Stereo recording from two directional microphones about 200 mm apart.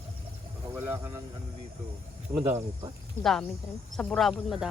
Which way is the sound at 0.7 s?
10° right (ahead or behind).